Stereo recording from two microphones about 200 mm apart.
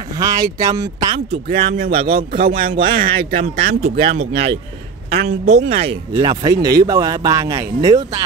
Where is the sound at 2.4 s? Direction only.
45° right (ahead or behind).